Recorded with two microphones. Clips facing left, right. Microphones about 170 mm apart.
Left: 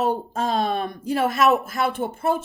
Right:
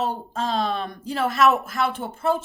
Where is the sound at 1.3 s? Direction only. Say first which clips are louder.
Right 1 dB; 40° left (ahead or behind).